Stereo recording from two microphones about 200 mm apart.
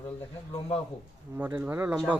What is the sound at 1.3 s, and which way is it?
Speech, 5° right (ahead or behind).